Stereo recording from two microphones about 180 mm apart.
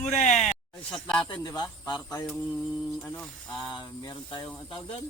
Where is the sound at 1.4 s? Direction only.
20° left (ahead or behind).